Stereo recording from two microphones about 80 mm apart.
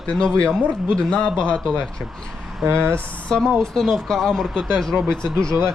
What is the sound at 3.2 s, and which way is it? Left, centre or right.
Speech, centre.